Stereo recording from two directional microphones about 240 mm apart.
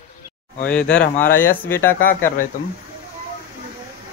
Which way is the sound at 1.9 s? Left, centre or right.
Left.